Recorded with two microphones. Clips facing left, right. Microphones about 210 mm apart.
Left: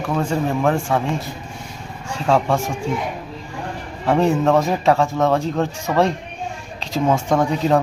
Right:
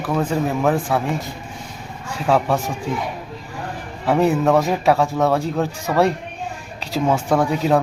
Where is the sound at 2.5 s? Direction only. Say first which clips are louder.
Left 1 dB; 10° left (ahead or behind).